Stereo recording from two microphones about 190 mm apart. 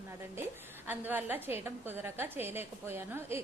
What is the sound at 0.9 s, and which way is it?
A woman's voice, 10° right (ahead or behind).